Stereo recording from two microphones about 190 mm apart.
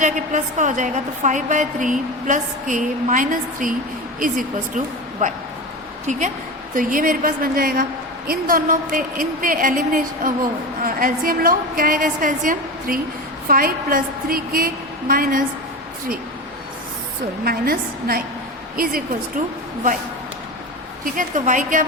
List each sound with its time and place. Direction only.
0.0 s a woman's voice: 40° right (ahead or behind)
17.4 s a woman's voice: 50° right (ahead or behind)
21.0 s a woman's voice: 45° right (ahead or behind)